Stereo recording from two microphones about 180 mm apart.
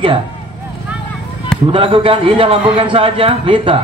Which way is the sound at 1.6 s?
30° right (ahead or behind).